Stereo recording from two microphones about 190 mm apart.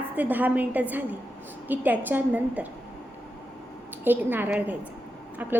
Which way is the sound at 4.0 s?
10° right (ahead or behind).